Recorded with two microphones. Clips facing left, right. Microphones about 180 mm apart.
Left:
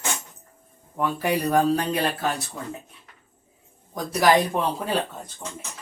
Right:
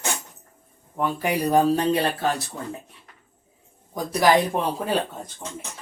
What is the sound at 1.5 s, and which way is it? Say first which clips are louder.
Speech: right 4 dB; 25° right (ahead or behind).